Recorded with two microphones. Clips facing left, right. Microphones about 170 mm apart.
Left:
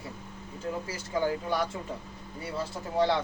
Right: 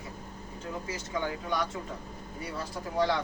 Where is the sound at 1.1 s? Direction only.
30° left (ahead or behind).